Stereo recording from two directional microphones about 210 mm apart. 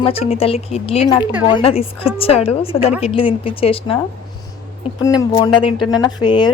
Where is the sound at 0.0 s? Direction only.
25° left (ahead or behind).